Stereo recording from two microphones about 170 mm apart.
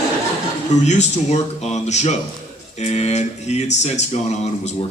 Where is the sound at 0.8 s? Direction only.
40° left (ahead or behind).